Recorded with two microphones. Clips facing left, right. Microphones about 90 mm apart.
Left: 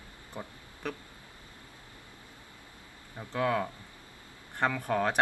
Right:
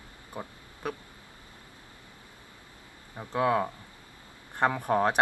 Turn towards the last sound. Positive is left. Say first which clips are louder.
# right 4 dB
turn(degrees=-20)  # may be behind; listen again after turning